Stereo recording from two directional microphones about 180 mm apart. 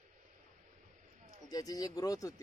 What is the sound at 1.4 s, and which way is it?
Speech, 20° left (ahead or behind).